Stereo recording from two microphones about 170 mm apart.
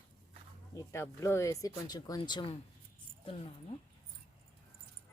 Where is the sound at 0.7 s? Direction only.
15° left (ahead or behind).